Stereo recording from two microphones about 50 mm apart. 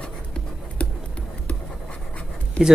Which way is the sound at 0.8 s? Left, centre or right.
Left.